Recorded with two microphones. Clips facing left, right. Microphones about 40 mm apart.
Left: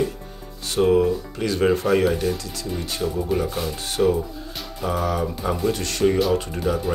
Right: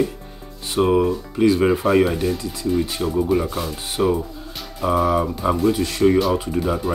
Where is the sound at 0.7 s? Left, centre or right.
Centre.